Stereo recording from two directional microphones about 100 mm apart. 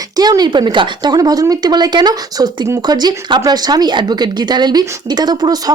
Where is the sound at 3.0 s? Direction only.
45° right (ahead or behind).